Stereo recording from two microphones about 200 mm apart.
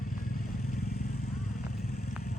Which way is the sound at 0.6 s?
35° left (ahead or behind).